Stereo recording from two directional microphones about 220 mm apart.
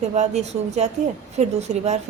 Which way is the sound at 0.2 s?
30° right (ahead or behind).